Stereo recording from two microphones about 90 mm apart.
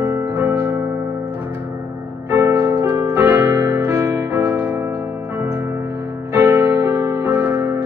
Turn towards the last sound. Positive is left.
turn(degrees=-25)  # may be behind; listen again after turning